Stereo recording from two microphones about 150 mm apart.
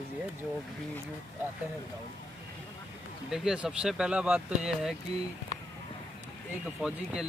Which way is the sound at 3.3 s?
5° right (ahead or behind).